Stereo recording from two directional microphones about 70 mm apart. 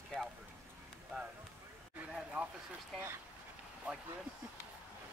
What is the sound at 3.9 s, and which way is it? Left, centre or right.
Speech, centre.